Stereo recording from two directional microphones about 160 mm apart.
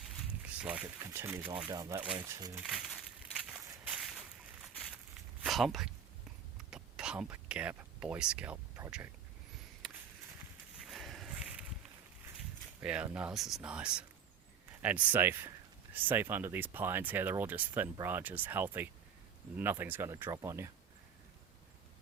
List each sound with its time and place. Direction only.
0.4 s speech: 10° right (ahead or behind)
1.7 s speech: 25° right (ahead or behind)
2.6 s crushing: 5° right (ahead or behind)
5.4 s speech: centre (ahead or behind)
6.7 s a sound: 5° right (ahead or behind)
10.8 s a sound: centre (ahead or behind)
12.8 s speech: 5° right (ahead or behind)